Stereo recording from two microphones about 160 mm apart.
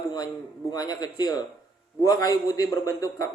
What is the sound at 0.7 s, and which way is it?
A man's voice, 25° left (ahead or behind).